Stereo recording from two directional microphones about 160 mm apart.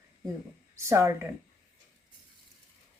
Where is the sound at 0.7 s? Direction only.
15° right (ahead or behind).